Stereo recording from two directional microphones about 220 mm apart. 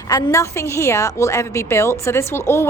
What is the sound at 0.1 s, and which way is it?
A woman's voice, 15° left (ahead or behind).